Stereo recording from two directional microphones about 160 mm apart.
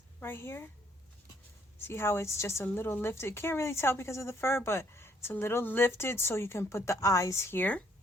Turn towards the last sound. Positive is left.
turn(degrees=10)  # may be behind; listen again after turning